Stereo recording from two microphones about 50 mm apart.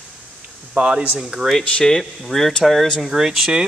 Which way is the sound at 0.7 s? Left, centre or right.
Right.